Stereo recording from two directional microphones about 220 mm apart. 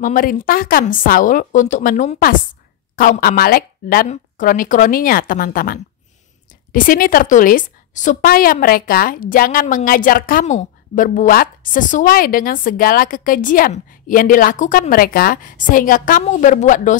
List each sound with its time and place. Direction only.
0.0 s a woman's voice: 40° left (ahead or behind)